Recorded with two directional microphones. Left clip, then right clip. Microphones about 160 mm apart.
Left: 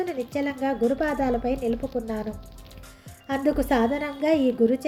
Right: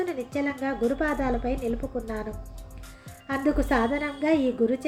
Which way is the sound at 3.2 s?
40° left (ahead or behind).